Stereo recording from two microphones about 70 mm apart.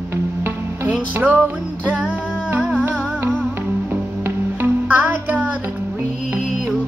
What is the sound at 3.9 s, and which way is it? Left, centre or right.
Music, right.